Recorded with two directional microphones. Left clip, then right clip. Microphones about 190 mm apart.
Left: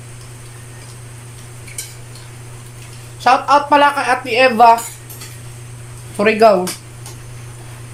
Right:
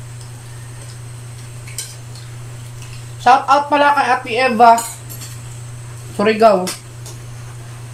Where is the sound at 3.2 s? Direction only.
30° left (ahead or behind).